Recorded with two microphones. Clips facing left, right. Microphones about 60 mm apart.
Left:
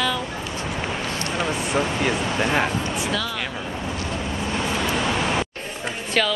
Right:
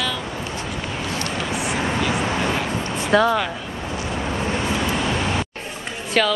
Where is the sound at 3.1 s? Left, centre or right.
Right.